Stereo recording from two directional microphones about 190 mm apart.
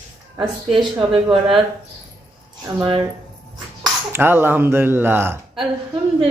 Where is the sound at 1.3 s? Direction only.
25° right (ahead or behind).